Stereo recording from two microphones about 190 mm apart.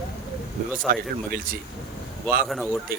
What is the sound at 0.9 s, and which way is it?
Speech, 50° right (ahead or behind).